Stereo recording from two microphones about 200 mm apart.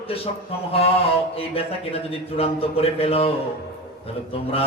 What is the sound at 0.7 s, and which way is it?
Speech, 30° left (ahead or behind).